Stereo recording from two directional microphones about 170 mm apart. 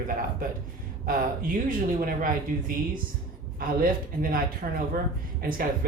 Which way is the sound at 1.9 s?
55° right (ahead or behind).